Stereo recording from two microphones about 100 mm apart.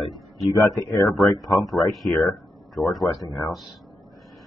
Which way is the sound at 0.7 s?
30° left (ahead or behind).